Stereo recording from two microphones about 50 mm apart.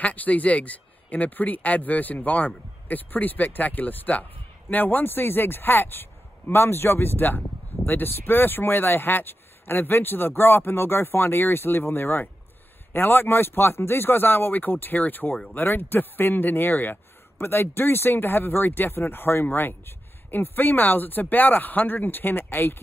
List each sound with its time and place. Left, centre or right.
0.0 s speech: left